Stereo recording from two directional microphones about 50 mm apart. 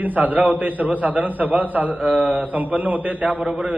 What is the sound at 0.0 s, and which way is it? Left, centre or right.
A man's voice, right.